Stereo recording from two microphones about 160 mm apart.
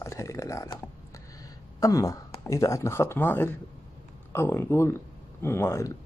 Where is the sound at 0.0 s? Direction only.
20° left (ahead or behind).